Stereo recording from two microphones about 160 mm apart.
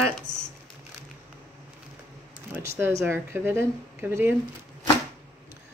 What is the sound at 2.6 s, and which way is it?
Speech, 15° right (ahead or behind).